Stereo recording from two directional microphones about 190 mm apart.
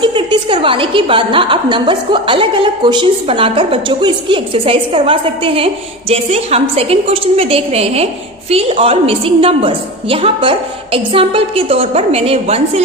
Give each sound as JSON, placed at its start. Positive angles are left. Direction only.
{"t": 0.0, "sound": "a woman's voice", "side_deg": -25}